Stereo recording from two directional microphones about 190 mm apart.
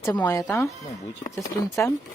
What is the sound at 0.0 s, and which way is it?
Speech, 10° left (ahead or behind).